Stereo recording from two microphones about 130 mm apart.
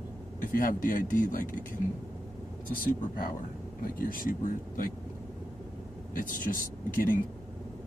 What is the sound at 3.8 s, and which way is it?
Speech, 90° left.